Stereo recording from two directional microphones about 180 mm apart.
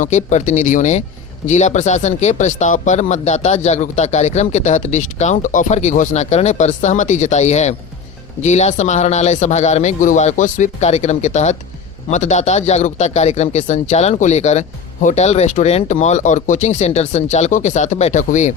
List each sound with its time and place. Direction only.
0.0 s speech: 45° left (ahead or behind)